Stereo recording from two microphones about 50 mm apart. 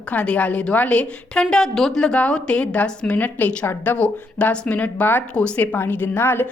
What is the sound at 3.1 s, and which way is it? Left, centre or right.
A woman's voice, left.